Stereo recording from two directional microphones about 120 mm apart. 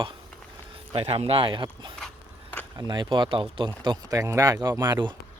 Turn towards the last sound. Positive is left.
turn(degrees=-35)  # may be behind; listen again after turning